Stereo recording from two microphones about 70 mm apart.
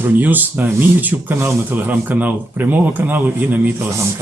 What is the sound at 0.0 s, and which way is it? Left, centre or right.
Speech, right.